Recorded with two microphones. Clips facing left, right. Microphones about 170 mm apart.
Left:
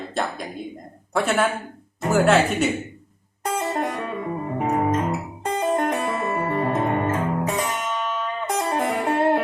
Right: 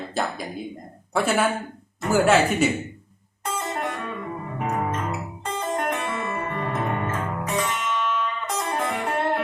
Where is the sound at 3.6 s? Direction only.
40° left (ahead or behind).